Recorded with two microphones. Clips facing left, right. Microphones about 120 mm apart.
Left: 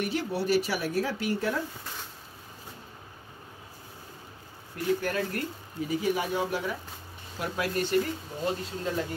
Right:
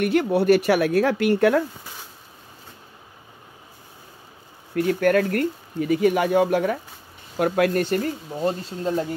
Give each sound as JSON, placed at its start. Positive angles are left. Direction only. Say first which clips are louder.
{"t": 0.0, "sound": "speech", "louder": "right 10 dB", "side_deg": -60}
{"t": 4.7, "sound": "speech", "louder": "right 9 dB", "side_deg": -65}